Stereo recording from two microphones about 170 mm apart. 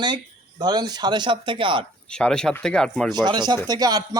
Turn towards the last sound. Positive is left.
turn(degrees=-25)  # may be behind; listen again after turning